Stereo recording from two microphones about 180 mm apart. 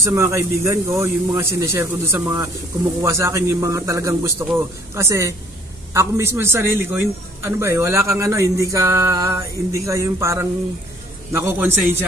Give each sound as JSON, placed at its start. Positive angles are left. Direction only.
{"t": 0.0, "sound": "a man's voice", "side_deg": -15}